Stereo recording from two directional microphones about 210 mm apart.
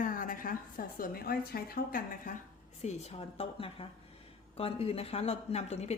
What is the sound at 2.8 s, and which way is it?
A woman's voice, 30° left (ahead or behind).